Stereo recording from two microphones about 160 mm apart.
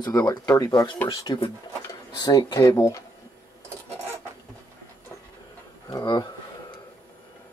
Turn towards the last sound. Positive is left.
turn(degrees=25)  # may be behind; listen again after turning